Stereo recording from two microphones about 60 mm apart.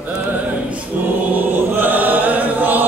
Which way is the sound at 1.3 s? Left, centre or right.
Right.